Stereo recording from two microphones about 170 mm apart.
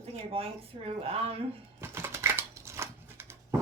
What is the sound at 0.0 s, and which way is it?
A woman's voice, 35° right (ahead or behind).